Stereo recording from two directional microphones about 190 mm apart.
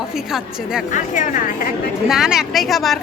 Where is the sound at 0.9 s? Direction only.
40° left (ahead or behind).